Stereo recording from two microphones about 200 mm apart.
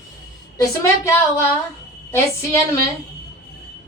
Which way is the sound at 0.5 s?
15° left (ahead or behind).